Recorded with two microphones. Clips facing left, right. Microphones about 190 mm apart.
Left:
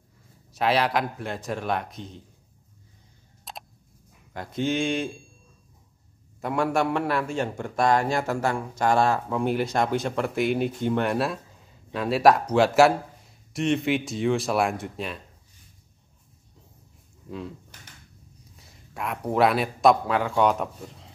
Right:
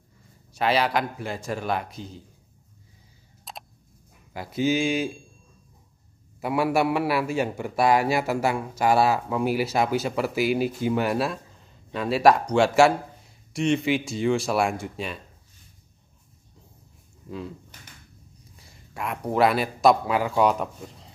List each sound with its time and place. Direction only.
0.5 s a man's voice: centre (ahead or behind)
3.5 s a sound: centre (ahead or behind)
4.3 s a man's voice: 5° right (ahead or behind)
6.4 s a man's voice: 5° right (ahead or behind)
17.3 s a man's voice: centre (ahead or behind)